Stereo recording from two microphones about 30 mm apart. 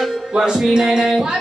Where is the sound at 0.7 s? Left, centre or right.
Centre.